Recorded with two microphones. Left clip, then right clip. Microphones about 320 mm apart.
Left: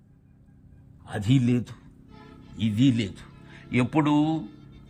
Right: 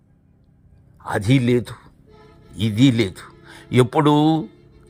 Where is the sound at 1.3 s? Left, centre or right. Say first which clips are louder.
Right 6 dB; centre.